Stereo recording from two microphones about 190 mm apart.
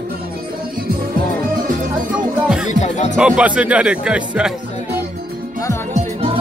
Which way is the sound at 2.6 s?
35° left (ahead or behind).